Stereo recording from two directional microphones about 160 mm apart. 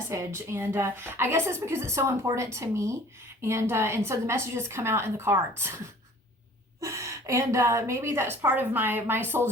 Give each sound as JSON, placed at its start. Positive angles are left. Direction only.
{"t": 0.1, "sound": "a woman's voice", "side_deg": -15}